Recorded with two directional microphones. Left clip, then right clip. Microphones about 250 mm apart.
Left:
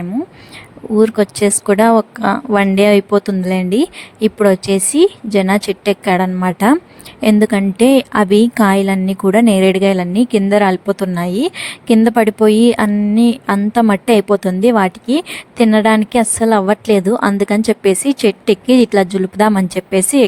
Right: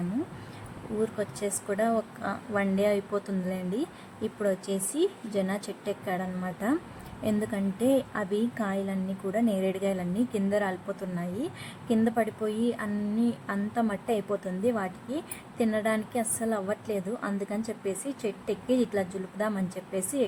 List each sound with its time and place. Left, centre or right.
0.9 s a woman's voice: left